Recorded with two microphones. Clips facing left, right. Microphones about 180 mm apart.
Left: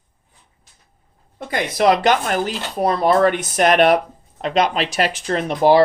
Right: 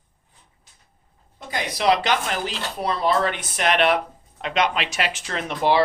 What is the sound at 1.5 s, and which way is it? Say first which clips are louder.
Speech: left 5 dB; 55° left (ahead or behind).